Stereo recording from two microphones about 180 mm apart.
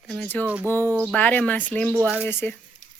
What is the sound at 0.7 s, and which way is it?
Speech, 10° left (ahead or behind).